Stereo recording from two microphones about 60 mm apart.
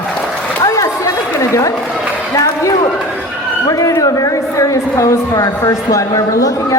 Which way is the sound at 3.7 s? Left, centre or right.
Left.